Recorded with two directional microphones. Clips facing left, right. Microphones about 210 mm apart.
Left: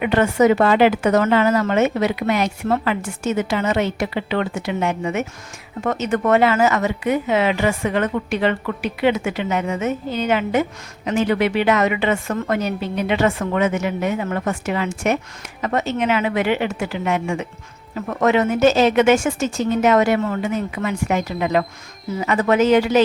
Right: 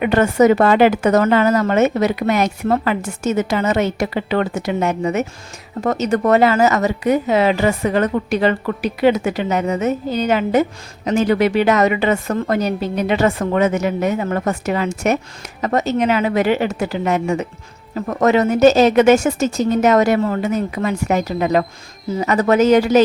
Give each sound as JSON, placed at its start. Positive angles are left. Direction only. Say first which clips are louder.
{"t": 0.0, "sound": "speech", "louder": "right 3 dB", "side_deg": -40}